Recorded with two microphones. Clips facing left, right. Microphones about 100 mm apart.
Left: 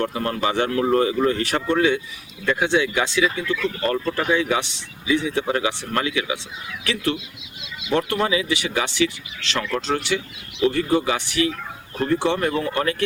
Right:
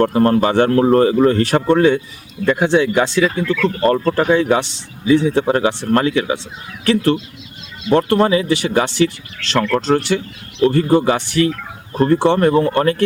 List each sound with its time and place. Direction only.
0.0 s speech: 45° right (ahead or behind)